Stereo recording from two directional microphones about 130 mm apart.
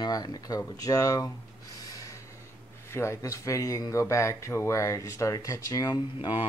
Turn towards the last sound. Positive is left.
turn(degrees=45)  # may be behind; listen again after turning